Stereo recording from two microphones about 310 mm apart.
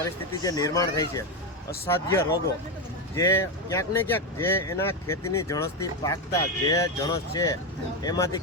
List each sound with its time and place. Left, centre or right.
0.0 s speech: centre